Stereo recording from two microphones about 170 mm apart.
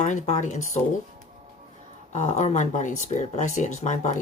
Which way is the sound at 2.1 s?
45° left (ahead or behind).